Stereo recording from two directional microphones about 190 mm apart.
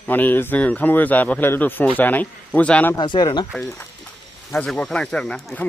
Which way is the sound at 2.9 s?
25° left (ahead or behind).